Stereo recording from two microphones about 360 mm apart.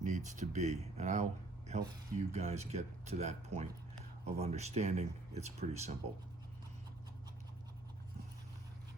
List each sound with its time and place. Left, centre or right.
0.0 s speech: right